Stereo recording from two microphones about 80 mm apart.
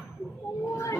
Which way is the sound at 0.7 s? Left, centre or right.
Left.